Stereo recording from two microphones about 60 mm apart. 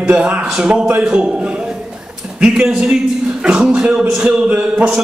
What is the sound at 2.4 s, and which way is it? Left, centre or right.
A man's voice, centre.